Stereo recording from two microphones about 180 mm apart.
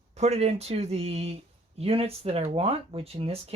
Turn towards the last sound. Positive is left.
turn(degrees=-35)  # may be behind; listen again after turning